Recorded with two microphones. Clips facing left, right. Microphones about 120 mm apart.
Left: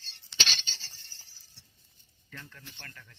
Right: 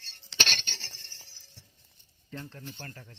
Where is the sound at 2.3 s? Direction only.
35° right (ahead or behind).